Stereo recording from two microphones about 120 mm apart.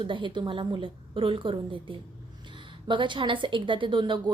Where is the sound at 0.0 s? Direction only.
40° right (ahead or behind).